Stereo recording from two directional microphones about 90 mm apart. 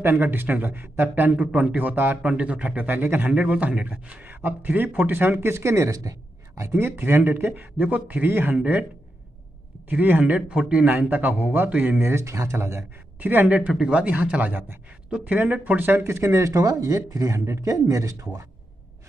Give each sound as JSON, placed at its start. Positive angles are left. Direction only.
{"t": 0.0, "sound": "a man's voice", "side_deg": -20}
{"t": 9.8, "sound": "a man's voice", "side_deg": -20}
{"t": 13.2, "sound": "a man's voice", "side_deg": -20}